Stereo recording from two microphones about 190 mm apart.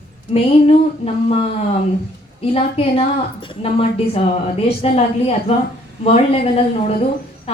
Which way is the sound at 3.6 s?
30° left (ahead or behind).